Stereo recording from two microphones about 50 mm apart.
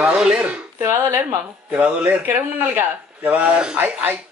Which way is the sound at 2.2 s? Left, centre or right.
Right.